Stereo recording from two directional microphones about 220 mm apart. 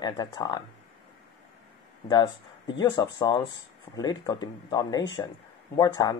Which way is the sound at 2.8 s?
20° left (ahead or behind).